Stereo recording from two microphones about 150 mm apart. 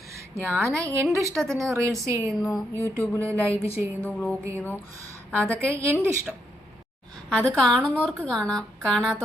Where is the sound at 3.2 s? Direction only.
20° right (ahead or behind).